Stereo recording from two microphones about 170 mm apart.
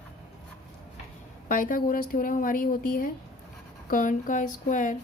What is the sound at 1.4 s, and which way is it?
A woman's voice, 55° left (ahead or behind).